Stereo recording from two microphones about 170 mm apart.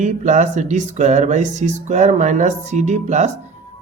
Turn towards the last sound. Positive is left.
turn(degrees=-45)  # may be behind; listen again after turning